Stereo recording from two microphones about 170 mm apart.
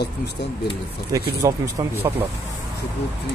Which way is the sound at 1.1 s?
20° right (ahead or behind).